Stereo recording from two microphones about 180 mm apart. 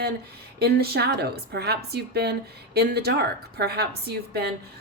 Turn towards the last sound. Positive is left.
turn(degrees=-60)  # may be behind; listen again after turning